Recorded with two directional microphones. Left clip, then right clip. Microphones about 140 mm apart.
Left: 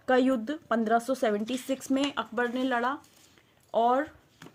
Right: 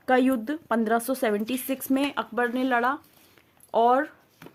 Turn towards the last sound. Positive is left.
turn(degrees=-50)  # may be behind; listen again after turning